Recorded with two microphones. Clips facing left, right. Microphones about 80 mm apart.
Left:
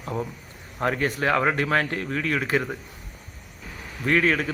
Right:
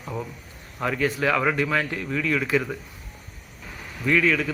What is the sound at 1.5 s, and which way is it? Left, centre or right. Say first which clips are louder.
Speech: left 1 dB; left.